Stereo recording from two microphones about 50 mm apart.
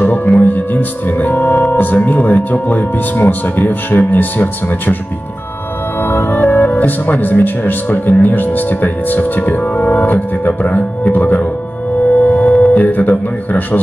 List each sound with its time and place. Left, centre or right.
0.0 s music: left
0.4 s speech: left
6.0 s speech: left
12.1 s music: left
12.7 s speech: left